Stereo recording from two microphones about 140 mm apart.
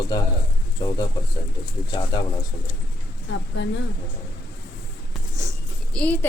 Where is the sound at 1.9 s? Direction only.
35° left (ahead or behind).